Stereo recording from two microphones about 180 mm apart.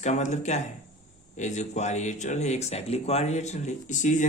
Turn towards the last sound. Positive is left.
turn(degrees=45)  # may be behind; listen again after turning